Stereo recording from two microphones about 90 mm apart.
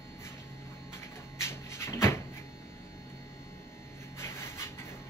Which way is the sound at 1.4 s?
30° left (ahead or behind).